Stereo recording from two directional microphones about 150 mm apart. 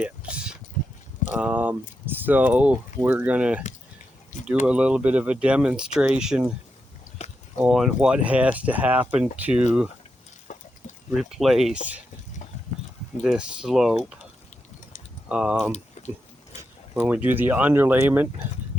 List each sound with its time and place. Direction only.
0.0 s a sound: 10° right (ahead or behind)
1.3 s speech: 10° right (ahead or behind)
4.6 s speech: 5° right (ahead or behind)
7.7 s speech: centre (ahead or behind)
10.5 s a sound: 55° left (ahead or behind)
11.1 s speech: centre (ahead or behind)
13.2 s speech: 5° right (ahead or behind)
15.3 s speech: 5° right (ahead or behind)
15.7 s a sound: 50° left (ahead or behind)
16.9 s speech: 10° right (ahead or behind)